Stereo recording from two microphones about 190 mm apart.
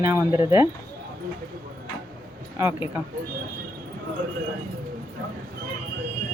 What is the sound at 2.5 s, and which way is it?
Speech, 10° right (ahead or behind).